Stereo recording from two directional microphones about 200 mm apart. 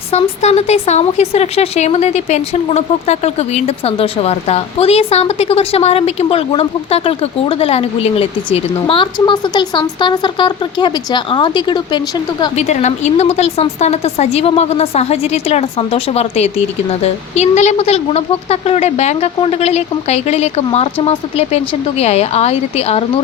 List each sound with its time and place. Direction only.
0.1 s speech: 35° left (ahead or behind)
12.5 s speech: 35° left (ahead or behind)